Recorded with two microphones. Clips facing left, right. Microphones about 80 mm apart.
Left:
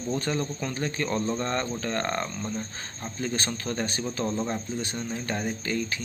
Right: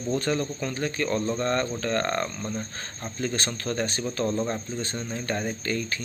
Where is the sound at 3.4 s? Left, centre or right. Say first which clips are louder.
Right 2 dB; centre.